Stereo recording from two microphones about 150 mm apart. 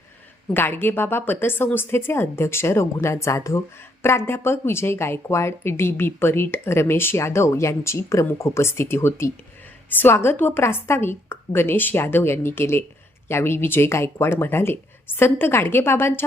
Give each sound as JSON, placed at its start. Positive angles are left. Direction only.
{"t": 0.5, "sound": "speech", "side_deg": 15}